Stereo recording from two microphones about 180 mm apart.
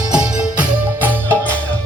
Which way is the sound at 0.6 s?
10° right (ahead or behind).